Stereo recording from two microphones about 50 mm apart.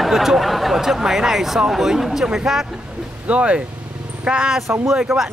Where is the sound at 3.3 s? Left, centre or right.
Right.